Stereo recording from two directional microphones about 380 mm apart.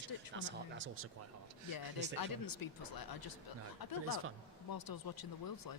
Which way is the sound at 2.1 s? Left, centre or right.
Left.